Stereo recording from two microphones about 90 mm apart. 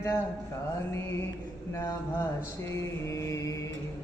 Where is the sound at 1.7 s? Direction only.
35° left (ahead or behind).